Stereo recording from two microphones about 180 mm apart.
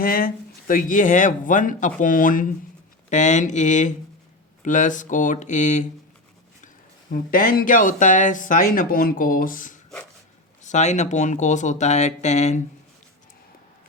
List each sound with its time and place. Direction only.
0.0 s speech: 55° left (ahead or behind)
7.1 s speech: 50° left (ahead or behind)